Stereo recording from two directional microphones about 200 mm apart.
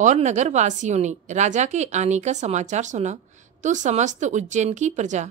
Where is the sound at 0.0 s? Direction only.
35° right (ahead or behind).